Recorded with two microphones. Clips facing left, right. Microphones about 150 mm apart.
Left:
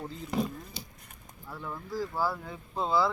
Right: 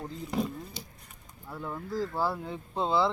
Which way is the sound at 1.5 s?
15° right (ahead or behind).